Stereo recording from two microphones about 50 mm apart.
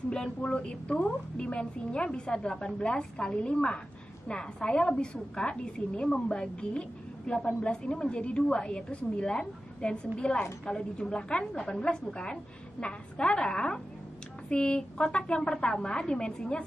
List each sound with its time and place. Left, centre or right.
0.1 s a woman's voice: centre